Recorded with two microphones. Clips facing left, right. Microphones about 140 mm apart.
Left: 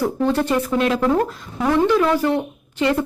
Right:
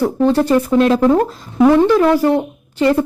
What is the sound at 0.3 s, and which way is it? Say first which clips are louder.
A woman's voice: right 6 dB; 35° right (ahead or behind).